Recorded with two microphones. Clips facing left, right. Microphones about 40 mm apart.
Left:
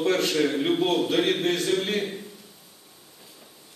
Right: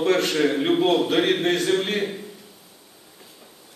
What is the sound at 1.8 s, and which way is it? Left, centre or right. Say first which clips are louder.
Speech: right 2 dB; right.